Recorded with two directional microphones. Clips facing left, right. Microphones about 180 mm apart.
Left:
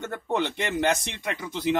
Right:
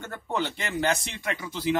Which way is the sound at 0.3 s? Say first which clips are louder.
Left 3 dB; 20° left (ahead or behind).